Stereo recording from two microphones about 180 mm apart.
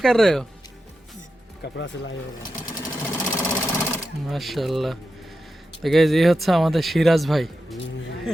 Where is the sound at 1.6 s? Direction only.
90° left.